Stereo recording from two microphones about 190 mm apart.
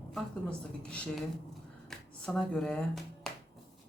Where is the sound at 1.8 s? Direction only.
5° left (ahead or behind).